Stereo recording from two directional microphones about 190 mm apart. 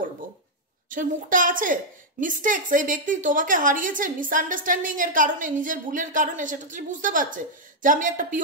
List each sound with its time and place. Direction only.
0.8 s a woman's voice: 45° right (ahead or behind)